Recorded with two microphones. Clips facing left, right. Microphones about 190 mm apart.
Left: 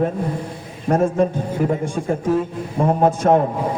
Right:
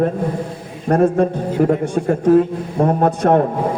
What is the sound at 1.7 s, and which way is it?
A man's voice, 65° right (ahead or behind).